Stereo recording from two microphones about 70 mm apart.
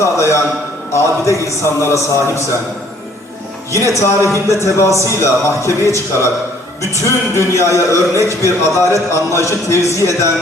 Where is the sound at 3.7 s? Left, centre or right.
Left.